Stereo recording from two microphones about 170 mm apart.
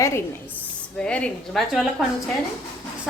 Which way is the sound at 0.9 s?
5° left (ahead or behind).